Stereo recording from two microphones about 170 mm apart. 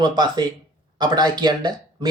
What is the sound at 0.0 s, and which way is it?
Speech, 25° right (ahead or behind).